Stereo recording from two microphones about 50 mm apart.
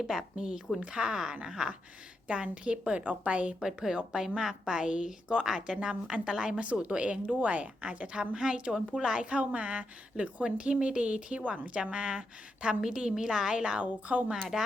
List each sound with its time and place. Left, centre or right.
0.1 s a woman's voice: centre
3.6 s a woman's voice: centre
6.6 s a woman's voice: right